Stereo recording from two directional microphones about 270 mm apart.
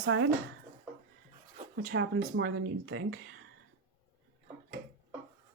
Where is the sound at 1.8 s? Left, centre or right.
Right.